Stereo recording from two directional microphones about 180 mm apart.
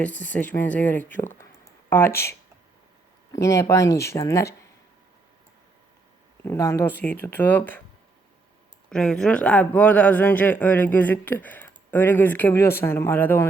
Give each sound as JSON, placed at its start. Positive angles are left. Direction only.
{"t": 0.0, "sound": "speech", "side_deg": 10}
{"t": 3.3, "sound": "speech", "side_deg": 15}
{"t": 6.4, "sound": "speech", "side_deg": 15}
{"t": 8.9, "sound": "speech", "side_deg": 5}